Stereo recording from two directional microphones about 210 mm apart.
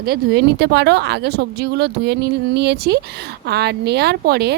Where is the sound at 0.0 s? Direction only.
50° right (ahead or behind).